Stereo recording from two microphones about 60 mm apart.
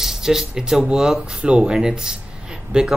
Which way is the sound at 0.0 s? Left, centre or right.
Centre.